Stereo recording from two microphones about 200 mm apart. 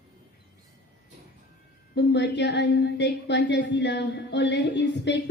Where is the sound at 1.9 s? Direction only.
60° left (ahead or behind).